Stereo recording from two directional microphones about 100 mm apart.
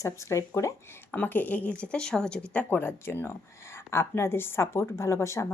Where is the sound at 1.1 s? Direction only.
15° left (ahead or behind).